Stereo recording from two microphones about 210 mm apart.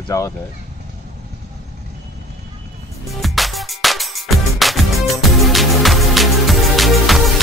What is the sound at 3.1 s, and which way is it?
Music, centre (ahead or behind).